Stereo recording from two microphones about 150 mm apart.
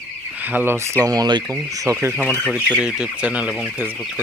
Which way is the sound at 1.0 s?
25° right (ahead or behind).